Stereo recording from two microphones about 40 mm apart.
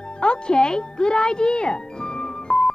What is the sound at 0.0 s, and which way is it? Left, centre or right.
A child's voice, left.